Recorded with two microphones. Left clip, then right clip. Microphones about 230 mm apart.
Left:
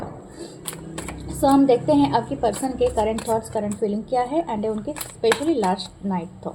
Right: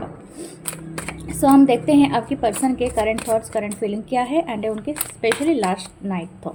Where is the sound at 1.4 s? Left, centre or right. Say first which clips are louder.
Right 2 dB; right.